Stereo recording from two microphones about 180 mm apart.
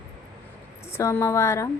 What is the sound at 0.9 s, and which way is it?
Speech, 15° left (ahead or behind).